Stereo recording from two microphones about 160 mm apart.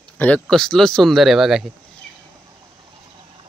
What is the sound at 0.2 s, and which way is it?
Speech, 5° left (ahead or behind).